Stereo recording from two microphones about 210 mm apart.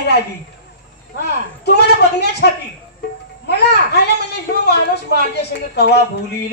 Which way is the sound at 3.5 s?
50° left (ahead or behind).